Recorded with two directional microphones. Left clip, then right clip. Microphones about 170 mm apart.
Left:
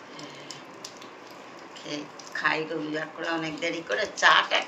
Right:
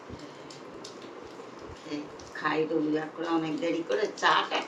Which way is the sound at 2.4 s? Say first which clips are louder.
Even; 30° right (ahead or behind).